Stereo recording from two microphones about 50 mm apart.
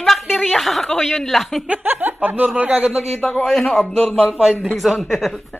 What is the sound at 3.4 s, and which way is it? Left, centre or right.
Speech, centre.